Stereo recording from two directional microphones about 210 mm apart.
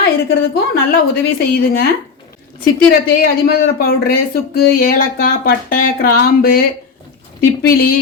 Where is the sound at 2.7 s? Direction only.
45° left (ahead or behind).